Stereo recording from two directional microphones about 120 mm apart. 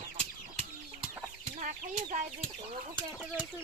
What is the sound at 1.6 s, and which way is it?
Chicken, 90° right.